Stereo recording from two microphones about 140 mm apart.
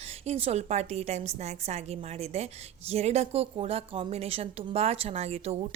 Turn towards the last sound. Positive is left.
turn(degrees=-50)  # may be behind; listen again after turning